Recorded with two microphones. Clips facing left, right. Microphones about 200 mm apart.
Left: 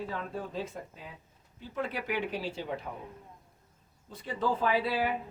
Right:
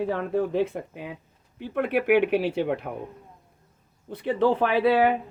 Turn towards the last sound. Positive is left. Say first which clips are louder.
# right 9 dB
turn(degrees=-65)  # may be behind; listen again after turning